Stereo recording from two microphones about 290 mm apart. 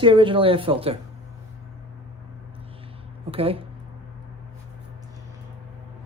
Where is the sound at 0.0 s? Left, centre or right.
Centre.